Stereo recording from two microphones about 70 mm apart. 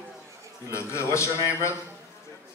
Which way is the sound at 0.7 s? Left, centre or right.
Left.